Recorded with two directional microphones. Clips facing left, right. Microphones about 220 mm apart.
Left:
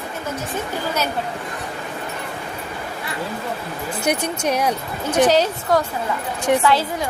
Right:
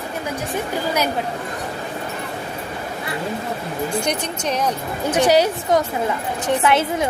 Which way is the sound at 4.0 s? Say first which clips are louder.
Left 2 dB; 10° left (ahead or behind).